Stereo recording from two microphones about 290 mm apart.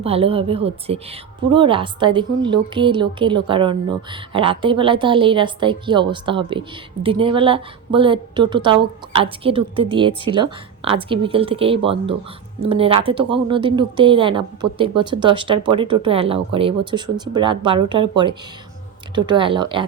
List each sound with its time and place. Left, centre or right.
0.0 s a woman's voice: centre